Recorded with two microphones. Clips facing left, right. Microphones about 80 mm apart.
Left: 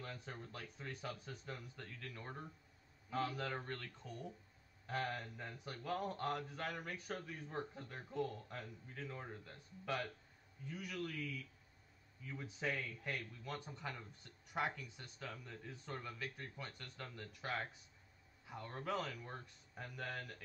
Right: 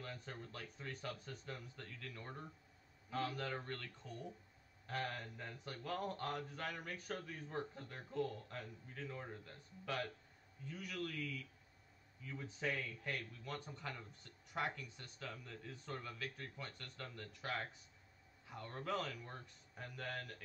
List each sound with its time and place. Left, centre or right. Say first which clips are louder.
0.0 s speech: even; centre
3.6 s speech: left 1 dB; centre
12.4 s speech: even; centre
15.4 s speech: even; centre
18.6 s speech: even; centre
18.9 s speech: even; centre